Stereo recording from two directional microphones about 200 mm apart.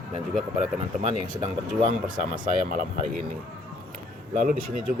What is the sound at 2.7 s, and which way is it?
Speech, 40° right (ahead or behind).